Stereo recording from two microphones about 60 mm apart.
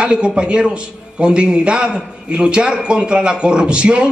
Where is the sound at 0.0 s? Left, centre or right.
Centre.